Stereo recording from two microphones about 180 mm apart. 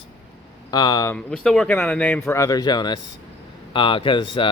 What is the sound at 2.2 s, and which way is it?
Speech, 20° left (ahead or behind).